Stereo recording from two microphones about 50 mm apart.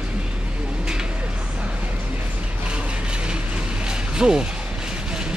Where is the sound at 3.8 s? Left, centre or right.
Centre.